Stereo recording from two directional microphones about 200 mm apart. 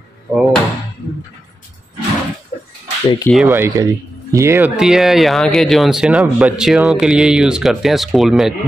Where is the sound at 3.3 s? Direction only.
5° right (ahead or behind).